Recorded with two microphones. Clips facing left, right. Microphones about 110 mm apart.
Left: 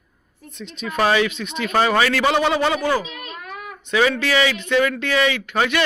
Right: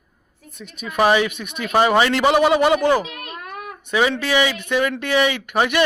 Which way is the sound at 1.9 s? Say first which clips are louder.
Right 2 dB; 25° right (ahead or behind).